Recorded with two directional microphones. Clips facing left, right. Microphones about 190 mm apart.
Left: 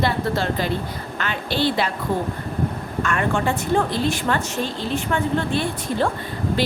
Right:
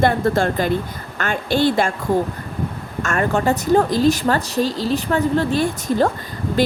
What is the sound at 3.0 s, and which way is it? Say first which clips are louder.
A woman's voice: right 3 dB; 40° right (ahead or behind).